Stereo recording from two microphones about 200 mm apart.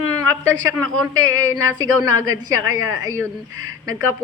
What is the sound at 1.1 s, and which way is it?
A woman's voice, 90° right.